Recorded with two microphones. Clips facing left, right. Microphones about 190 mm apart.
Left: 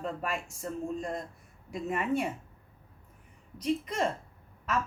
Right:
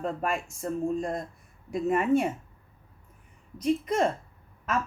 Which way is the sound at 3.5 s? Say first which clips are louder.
Right 5 dB; 50° right (ahead or behind).